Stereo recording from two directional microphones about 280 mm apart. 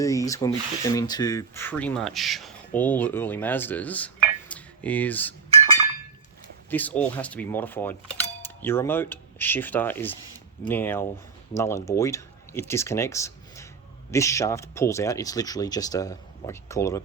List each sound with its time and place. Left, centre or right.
0.0 s speech: centre
6.7 s speech: centre